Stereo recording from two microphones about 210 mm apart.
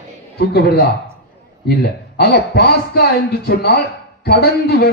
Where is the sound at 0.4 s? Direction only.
50° left (ahead or behind).